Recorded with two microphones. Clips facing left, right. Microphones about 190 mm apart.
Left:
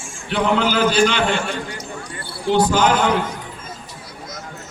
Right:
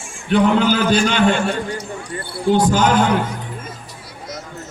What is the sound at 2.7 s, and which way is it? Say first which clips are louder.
Speech: right 2 dB; 45° right (ahead or behind).